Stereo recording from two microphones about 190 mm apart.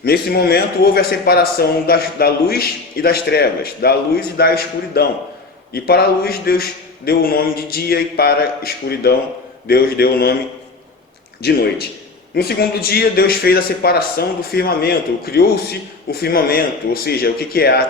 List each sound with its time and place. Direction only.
0.0 s a man's voice: 55° left (ahead or behind)
11.4 s a man's voice: 55° left (ahead or behind)